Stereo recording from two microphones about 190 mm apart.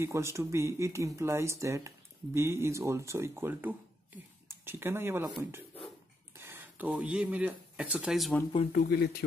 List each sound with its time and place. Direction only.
0.0 s speech: 15° right (ahead or behind)
6.3 s speech: 10° right (ahead or behind)
8.7 s speech: 55° left (ahead or behind)